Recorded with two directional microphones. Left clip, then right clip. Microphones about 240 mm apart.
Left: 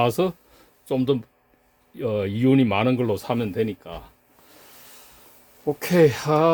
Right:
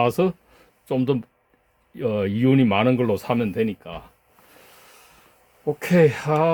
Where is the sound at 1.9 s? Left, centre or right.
Centre.